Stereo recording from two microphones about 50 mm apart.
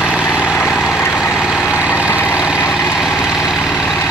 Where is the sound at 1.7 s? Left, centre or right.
Right.